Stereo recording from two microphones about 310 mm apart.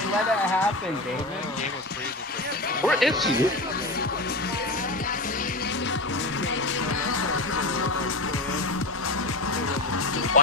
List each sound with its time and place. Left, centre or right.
2.9 s speech: centre
7.1 s music: left
10.4 s speech: left